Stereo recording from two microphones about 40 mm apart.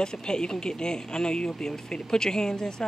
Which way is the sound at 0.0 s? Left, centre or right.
Centre.